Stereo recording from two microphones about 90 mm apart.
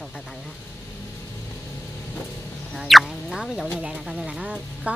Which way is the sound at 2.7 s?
Centre (ahead or behind).